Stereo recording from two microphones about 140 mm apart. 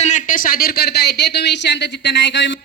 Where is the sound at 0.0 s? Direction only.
60° left (ahead or behind); by 0.8 s 90° left.